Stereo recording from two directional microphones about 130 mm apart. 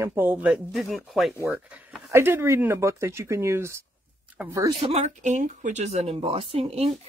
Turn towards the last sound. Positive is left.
turn(degrees=-50)  # may be behind; listen again after turning